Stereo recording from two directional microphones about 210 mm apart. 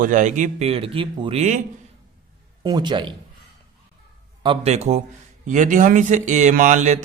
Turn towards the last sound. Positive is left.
turn(degrees=-35)  # may be behind; listen again after turning